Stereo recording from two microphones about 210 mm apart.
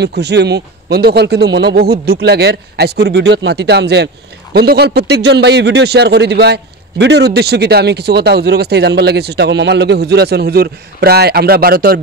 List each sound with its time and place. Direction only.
0.0 s a man's voice: 55° right (ahead or behind)